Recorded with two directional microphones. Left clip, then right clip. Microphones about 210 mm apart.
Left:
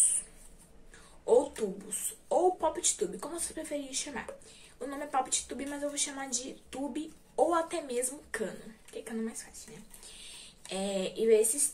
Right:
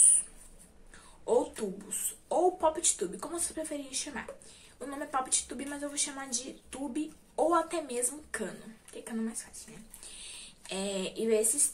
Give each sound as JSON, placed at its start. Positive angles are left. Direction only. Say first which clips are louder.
{"t": 1.2, "sound": "a woman's voice", "louder": "left 3 dB", "side_deg": 0}
{"t": 10.7, "sound": "a woman's voice", "louder": "left 1 dB", "side_deg": 0}